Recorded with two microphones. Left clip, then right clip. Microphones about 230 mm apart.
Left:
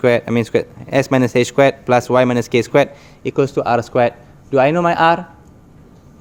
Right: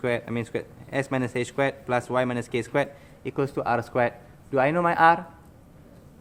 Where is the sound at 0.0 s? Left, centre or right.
Left.